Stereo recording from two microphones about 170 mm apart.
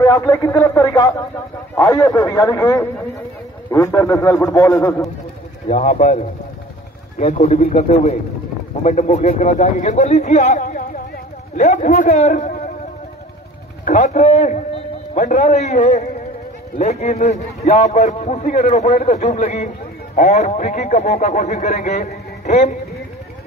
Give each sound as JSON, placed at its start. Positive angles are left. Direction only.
{"t": 0.0, "sound": "a man's voice", "side_deg": 20}
{"t": 5.7, "sound": "a man's voice", "side_deg": 40}
{"t": 13.8, "sound": "a man's voice", "side_deg": 45}